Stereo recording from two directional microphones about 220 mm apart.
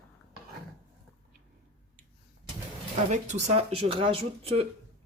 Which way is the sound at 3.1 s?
30° right (ahead or behind).